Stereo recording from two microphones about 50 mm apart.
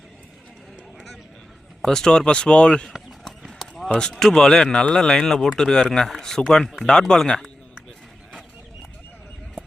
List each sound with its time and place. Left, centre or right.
1.8 s speech: centre
2.9 s run: centre
4.2 s speech: centre